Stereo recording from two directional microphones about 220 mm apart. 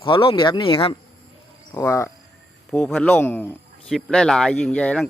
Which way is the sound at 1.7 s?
15° left (ahead or behind).